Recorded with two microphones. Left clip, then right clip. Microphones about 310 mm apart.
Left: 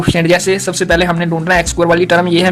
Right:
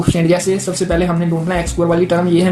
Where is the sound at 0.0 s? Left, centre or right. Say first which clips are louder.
Left 3 dB; left.